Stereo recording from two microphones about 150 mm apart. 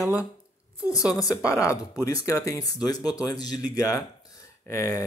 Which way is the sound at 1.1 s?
20° left (ahead or behind).